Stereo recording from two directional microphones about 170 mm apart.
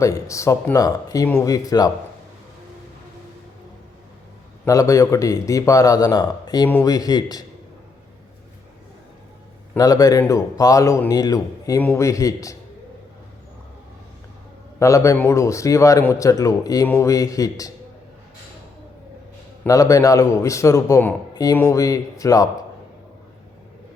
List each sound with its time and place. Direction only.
0.0 s a man's voice: 20° left (ahead or behind)
4.6 s a man's voice: 20° left (ahead or behind)
9.7 s a man's voice: 20° left (ahead or behind)
14.8 s a man's voice: 15° left (ahead or behind)
19.6 s a man's voice: 20° left (ahead or behind)